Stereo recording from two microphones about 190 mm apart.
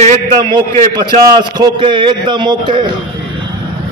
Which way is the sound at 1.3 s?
25° right (ahead or behind).